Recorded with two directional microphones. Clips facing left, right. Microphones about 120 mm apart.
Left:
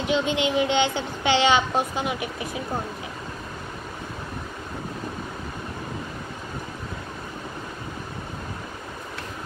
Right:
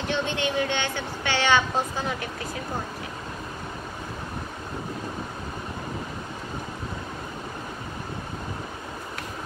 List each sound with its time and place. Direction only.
0.0 s a woman's voice: 15° left (ahead or behind)